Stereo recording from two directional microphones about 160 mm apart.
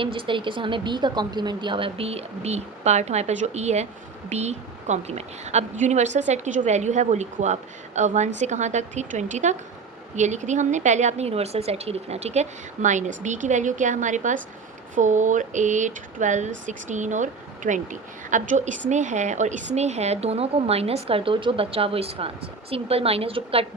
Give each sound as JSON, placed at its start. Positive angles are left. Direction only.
{"t": 0.0, "sound": "a woman's voice", "side_deg": -30}